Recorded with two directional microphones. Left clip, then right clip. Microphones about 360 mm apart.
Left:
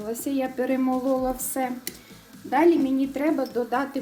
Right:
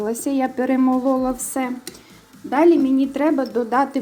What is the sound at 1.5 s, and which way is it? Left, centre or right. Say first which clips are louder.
Stir: right 3 dB; centre.